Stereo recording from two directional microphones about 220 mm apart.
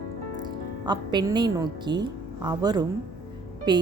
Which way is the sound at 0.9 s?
20° right (ahead or behind).